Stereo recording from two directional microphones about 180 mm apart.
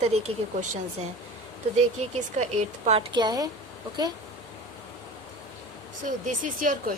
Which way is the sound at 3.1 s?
20° right (ahead or behind).